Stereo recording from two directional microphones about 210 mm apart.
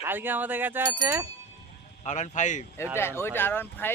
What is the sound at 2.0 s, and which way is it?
Speech, 35° left (ahead or behind).